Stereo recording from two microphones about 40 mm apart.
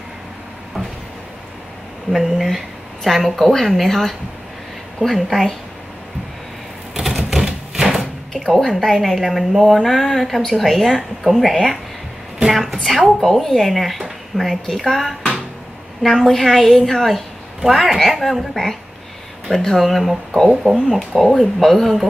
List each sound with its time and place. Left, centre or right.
2.1 s speech: centre
6.9 s typewriter: centre
8.0 s door: centre
8.7 s speech: centre
19.8 s speech: centre
21.3 s speech: centre